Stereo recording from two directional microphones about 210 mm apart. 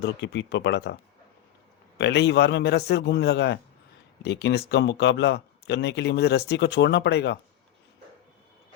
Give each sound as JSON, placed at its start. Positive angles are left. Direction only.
{"t": 0.0, "sound": "speech", "side_deg": 55}
{"t": 2.0, "sound": "a man's voice", "side_deg": 55}